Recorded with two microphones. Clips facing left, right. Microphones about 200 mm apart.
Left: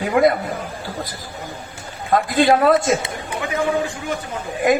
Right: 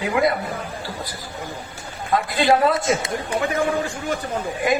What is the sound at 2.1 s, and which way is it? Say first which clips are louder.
Speech: left 3 dB; 50° left (ahead or behind).